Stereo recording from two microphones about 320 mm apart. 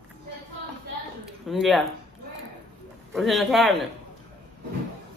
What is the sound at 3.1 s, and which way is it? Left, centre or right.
Speech, centre.